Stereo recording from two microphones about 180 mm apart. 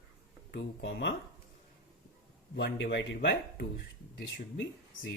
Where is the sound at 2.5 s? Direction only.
75° left (ahead or behind).